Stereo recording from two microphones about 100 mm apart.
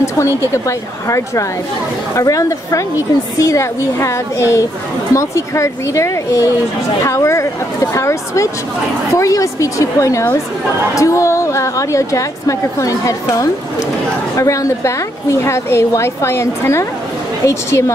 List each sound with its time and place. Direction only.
0.7 s a woman's voice: 30° left (ahead or behind)